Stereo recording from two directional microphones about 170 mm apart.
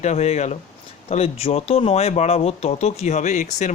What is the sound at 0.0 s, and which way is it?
Speech, 40° left (ahead or behind).